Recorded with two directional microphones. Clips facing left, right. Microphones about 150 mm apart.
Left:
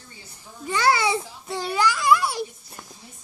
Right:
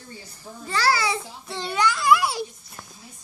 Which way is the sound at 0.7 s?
20° left (ahead or behind).